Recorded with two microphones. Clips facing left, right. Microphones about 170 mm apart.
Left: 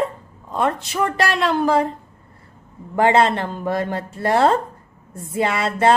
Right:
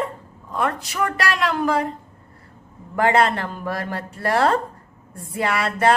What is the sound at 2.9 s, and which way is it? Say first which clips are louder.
A woman's voice: left 2 dB; 25° left (ahead or behind).